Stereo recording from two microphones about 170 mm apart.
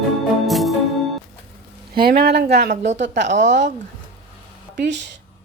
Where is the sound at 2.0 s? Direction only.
65° right (ahead or behind).